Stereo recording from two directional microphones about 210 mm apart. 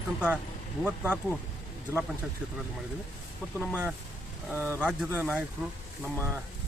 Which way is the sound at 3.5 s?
5° right (ahead or behind).